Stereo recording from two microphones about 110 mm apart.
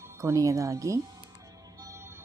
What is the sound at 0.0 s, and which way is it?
A woman's voice, 25° right (ahead or behind).